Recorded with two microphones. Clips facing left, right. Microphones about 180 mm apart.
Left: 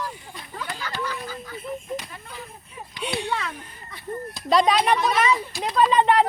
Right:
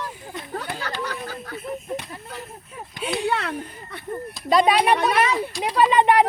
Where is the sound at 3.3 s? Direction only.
65° right (ahead or behind).